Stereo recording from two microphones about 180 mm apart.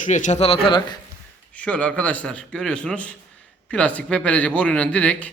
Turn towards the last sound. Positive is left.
turn(degrees=5)  # may be behind; listen again after turning